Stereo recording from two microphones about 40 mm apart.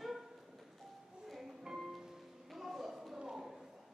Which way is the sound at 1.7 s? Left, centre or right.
Centre.